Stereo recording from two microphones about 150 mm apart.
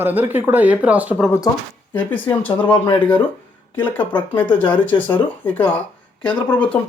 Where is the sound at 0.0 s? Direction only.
15° right (ahead or behind).